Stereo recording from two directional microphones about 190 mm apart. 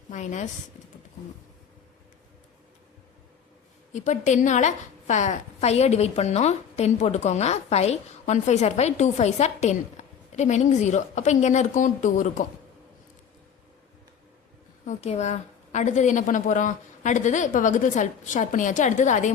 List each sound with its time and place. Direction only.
0.1 s a woman's voice: 40° left (ahead or behind)
3.9 s a woman's voice: 40° left (ahead or behind)
14.8 s a woman's voice: 35° left (ahead or behind)